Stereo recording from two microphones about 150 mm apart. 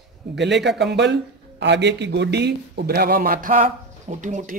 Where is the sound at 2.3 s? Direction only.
90° right.